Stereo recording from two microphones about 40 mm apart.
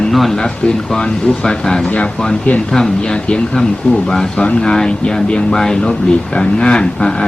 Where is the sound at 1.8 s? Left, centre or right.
Left.